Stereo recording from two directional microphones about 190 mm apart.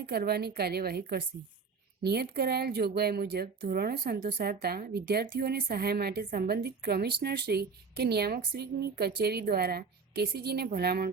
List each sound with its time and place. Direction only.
0.0 s a woman's voice: 55° right (ahead or behind)